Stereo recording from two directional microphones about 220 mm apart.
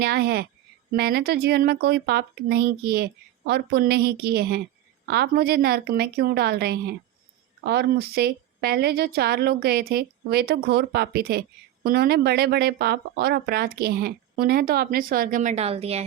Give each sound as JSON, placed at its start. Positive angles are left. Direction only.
{"t": 0.0, "sound": "a woman's voice", "side_deg": -45}